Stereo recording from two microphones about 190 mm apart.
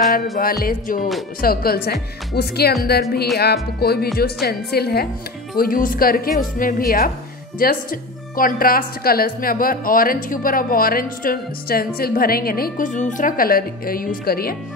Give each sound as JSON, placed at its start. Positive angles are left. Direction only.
{"t": 0.4, "sound": "speech", "side_deg": 50}